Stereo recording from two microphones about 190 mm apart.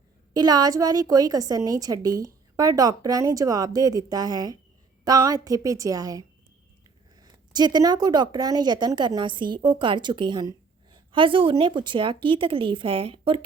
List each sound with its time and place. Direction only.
0.3 s a woman's voice: 20° right (ahead or behind)